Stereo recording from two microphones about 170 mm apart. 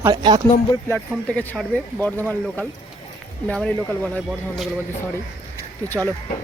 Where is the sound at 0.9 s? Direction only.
5° left (ahead or behind).